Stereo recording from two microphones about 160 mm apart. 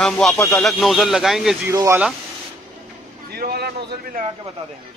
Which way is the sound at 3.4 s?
75° right (ahead or behind).